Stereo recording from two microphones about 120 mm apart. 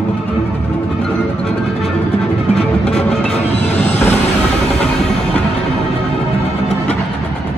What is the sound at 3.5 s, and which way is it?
Music, 65° left (ahead or behind).